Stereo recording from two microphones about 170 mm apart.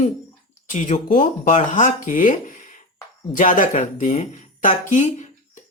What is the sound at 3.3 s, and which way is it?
Speech, 50° left (ahead or behind).